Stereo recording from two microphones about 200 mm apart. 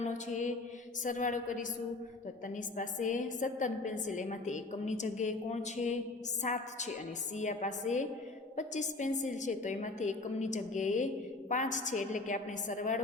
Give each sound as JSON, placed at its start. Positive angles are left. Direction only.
{"t": 0.0, "sound": "a woman's voice", "side_deg": 40}
{"t": 2.7, "sound": "a woman's voice", "side_deg": 40}